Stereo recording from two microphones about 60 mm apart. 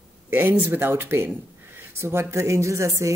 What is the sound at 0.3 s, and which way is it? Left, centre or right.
A woman's voice, right.